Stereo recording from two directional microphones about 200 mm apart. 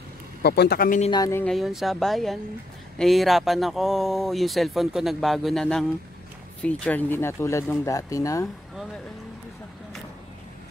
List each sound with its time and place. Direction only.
0.4 s speech: 55° left (ahead or behind)
1.1 s speech: 20° left (ahead or behind)
1.4 s speech: centre (ahead or behind); by 8.5 s 15° left (ahead or behind)